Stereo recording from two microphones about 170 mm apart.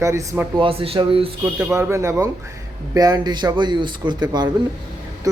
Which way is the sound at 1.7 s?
15° right (ahead or behind).